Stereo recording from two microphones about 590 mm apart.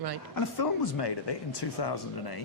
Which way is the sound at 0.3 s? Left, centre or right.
Left.